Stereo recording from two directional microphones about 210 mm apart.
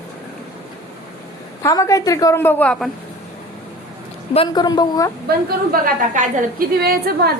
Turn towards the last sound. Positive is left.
turn(degrees=-45)  # may be behind; listen again after turning